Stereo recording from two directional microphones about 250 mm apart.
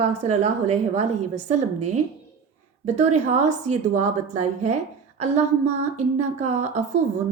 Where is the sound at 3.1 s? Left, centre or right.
Right.